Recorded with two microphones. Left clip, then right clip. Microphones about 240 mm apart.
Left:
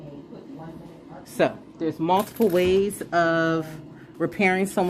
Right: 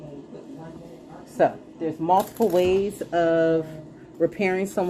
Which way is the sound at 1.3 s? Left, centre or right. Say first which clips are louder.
Right 2 dB; left.